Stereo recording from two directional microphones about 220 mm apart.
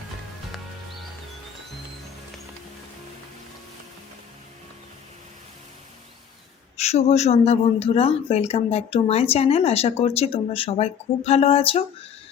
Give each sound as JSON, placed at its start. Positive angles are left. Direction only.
{"t": 6.7, "sound": "speech", "side_deg": 30}